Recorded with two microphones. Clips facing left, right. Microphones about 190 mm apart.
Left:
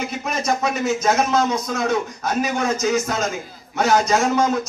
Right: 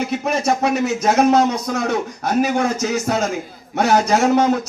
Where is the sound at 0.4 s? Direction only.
60° right (ahead or behind).